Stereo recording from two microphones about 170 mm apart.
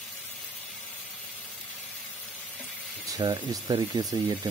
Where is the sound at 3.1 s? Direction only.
20° right (ahead or behind).